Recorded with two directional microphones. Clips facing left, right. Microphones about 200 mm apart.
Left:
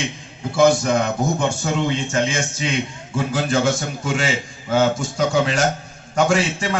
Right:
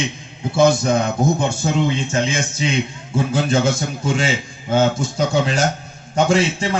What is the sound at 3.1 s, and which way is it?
A man's voice, 25° right (ahead or behind).